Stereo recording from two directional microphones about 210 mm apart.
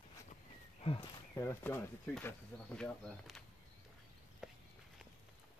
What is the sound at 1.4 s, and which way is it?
Speech, 10° left (ahead or behind).